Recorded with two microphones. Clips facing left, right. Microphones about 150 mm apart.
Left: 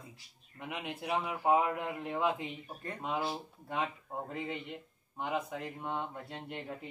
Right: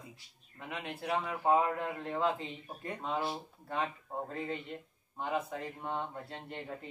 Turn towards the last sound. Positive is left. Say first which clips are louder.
# left 1 dB
turn(degrees=15)  # may be behind; listen again after turning